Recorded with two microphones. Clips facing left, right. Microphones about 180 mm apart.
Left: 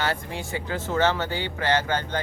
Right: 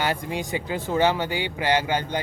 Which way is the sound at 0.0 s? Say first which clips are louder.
Right 2 dB; 15° right (ahead or behind).